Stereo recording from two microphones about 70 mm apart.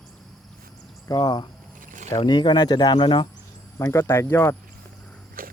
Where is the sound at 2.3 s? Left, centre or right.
Left.